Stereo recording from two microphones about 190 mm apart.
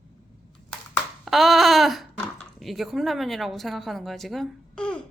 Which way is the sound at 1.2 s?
Centre (ahead or behind).